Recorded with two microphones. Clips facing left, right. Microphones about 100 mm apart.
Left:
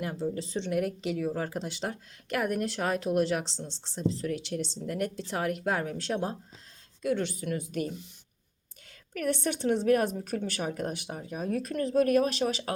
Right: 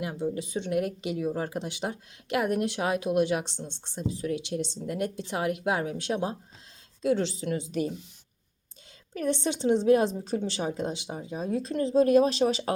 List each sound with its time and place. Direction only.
0.0 s speech: 10° right (ahead or behind)
7.0 s speech: 25° right (ahead or behind)
9.1 s speech: 25° right (ahead or behind)